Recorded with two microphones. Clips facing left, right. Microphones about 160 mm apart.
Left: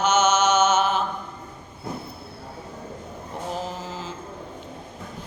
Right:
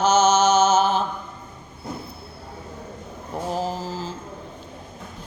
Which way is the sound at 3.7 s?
35° right (ahead or behind).